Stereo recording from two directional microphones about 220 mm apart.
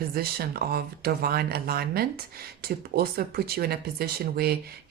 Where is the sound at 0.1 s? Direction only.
45° right (ahead or behind).